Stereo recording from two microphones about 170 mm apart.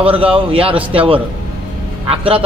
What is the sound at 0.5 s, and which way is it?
A man's voice, 35° right (ahead or behind).